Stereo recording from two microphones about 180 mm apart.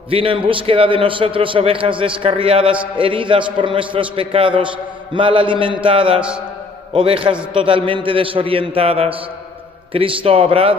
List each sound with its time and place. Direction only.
0.1 s a man's voice: 30° right (ahead or behind)